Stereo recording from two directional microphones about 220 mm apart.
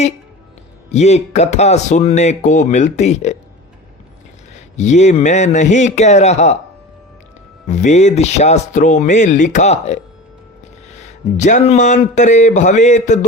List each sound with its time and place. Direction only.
0.9 s speech: 30° left (ahead or behind)
4.8 s speech: 30° left (ahead or behind)
7.7 s speech: 35° left (ahead or behind)
11.3 s speech: 35° left (ahead or behind)